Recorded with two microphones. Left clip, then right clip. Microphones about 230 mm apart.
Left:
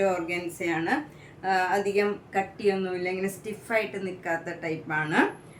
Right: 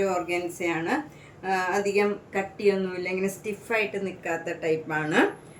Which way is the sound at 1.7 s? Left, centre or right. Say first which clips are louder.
Right 1 dB; centre.